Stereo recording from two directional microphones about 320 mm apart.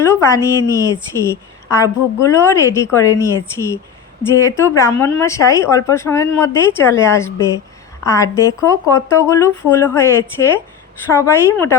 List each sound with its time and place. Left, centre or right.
0.0 s a woman's voice: centre